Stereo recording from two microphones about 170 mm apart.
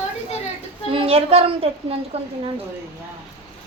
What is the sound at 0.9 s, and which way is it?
A woman's voice, 35° right (ahead or behind).